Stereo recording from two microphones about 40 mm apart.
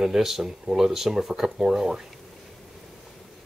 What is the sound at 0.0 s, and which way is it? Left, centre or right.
Speech, centre.